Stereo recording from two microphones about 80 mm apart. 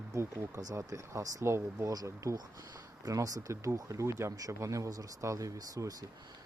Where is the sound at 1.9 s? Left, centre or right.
Right.